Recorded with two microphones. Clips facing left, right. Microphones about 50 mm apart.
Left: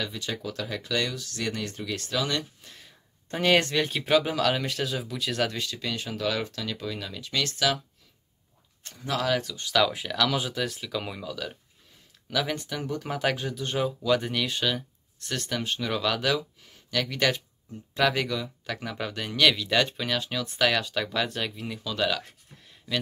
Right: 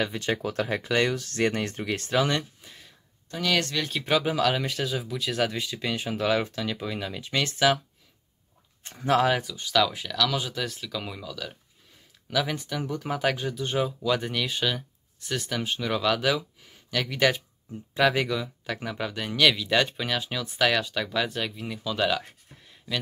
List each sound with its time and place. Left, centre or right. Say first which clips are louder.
0.0 s speech: right 5 dB; right
2.6 s a sound: right 1 dB; centre
3.3 s speech: left 4 dB; left; by 7.8 s right
8.8 s speech: right 7 dB; right
9.3 s speech: right 1 dB; centre